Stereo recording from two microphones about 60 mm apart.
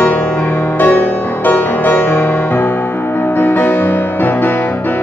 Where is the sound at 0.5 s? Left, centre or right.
Left.